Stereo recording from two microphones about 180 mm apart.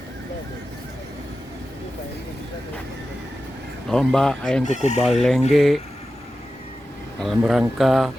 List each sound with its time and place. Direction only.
3.8 s speech: 5° left (ahead or behind)
4.6 s speech: 40° left (ahead or behind)
5.5 s speech: centre (ahead or behind)
7.2 s speech: centre (ahead or behind)